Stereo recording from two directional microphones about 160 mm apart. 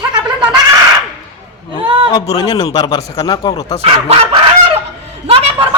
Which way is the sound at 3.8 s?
40° right (ahead or behind).